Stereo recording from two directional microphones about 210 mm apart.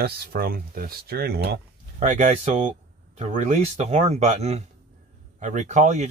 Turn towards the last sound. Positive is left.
turn(degrees=-35)  # may be behind; listen again after turning